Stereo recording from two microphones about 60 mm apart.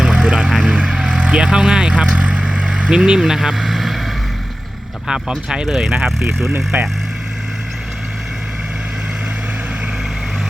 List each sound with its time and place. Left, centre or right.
0.0 s vehicle: centre
5.0 s speech: centre
6.7 s speech: right